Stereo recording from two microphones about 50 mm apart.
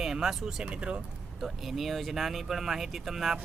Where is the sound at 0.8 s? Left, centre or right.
Right.